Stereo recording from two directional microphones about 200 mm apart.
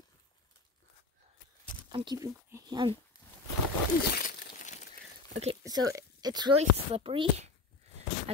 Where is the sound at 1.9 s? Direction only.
20° right (ahead or behind).